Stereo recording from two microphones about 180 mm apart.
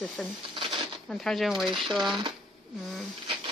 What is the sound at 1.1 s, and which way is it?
Speech, centre (ahead or behind).